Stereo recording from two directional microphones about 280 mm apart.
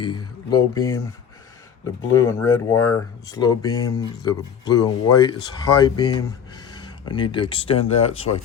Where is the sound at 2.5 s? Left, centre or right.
Centre.